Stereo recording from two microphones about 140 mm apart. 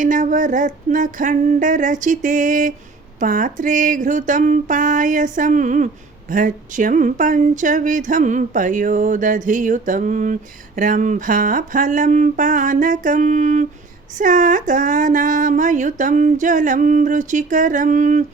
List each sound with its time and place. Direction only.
0.0 s speech: 70° right (ahead or behind)